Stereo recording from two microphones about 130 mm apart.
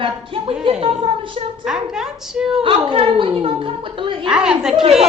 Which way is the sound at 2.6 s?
45° right (ahead or behind).